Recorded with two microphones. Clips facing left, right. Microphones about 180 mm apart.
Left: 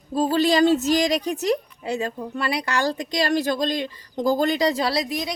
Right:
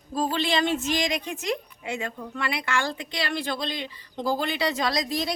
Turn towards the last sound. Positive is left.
turn(degrees=20)  # may be behind; listen again after turning